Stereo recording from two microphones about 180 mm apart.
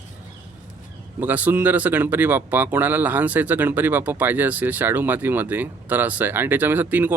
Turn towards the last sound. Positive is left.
turn(degrees=-10)  # may be behind; listen again after turning